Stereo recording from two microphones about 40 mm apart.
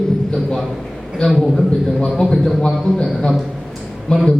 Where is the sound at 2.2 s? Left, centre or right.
Centre.